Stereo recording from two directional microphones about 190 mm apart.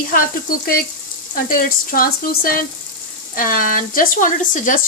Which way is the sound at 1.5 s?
45° left (ahead or behind).